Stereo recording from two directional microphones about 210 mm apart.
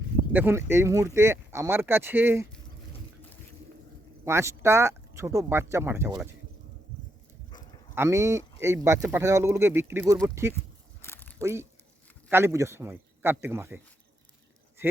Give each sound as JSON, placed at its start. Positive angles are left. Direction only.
{"t": 0.3, "sound": "speech", "side_deg": -10}
{"t": 4.3, "sound": "speech", "side_deg": -15}
{"t": 7.5, "sound": "livestock", "side_deg": 20}
{"t": 7.9, "sound": "speech", "side_deg": -15}
{"t": 11.0, "sound": "biting", "side_deg": 10}
{"t": 11.3, "sound": "speech", "side_deg": -10}